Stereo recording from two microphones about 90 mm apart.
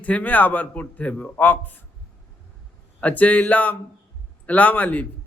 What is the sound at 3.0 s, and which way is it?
A man's voice, 15° left (ahead or behind).